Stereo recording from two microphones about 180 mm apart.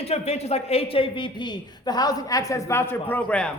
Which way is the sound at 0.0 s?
35° left (ahead or behind).